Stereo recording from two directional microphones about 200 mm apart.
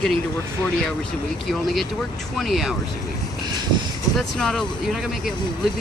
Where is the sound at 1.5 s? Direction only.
Centre (ahead or behind).